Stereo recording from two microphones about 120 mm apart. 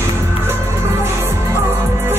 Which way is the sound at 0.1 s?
20° right (ahead or behind).